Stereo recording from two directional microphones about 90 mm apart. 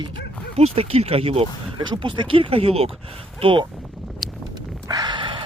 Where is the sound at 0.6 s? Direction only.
90° right.